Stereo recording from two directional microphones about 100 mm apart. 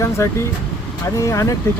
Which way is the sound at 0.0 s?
30° left (ahead or behind).